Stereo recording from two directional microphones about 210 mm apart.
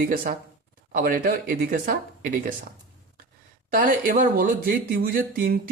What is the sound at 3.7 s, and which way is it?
Speech, 40° right (ahead or behind).